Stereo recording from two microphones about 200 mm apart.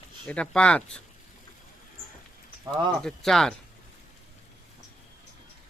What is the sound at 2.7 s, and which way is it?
Speech, 20° right (ahead or behind).